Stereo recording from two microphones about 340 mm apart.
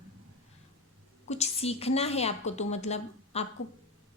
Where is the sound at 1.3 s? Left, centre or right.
Centre.